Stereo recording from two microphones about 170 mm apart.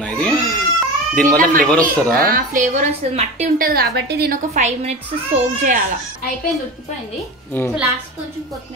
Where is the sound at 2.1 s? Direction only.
60° right (ahead or behind).